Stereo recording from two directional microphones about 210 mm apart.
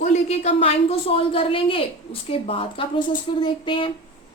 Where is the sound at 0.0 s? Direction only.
30° left (ahead or behind).